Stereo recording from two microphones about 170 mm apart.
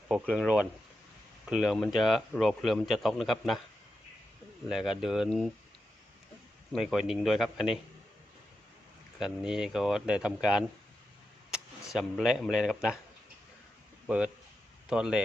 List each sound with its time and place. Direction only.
0.1 s speech: centre (ahead or behind)
4.7 s speech: centre (ahead or behind)
6.7 s speech: centre (ahead or behind)
9.1 s speech: 5° right (ahead or behind)
11.9 s speech: centre (ahead or behind)
14.8 s speech: 5° right (ahead or behind)